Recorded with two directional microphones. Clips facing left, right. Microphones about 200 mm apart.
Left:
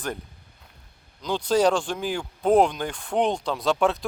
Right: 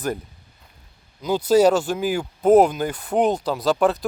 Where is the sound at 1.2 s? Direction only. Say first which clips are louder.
Right 5 dB; 5° right (ahead or behind).